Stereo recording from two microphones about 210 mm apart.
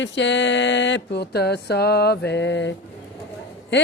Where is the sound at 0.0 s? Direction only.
60° left (ahead or behind).